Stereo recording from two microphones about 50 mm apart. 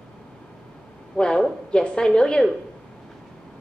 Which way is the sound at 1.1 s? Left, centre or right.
Centre.